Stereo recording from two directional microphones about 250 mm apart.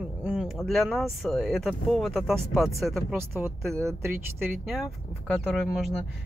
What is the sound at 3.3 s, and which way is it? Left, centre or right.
Speech, centre.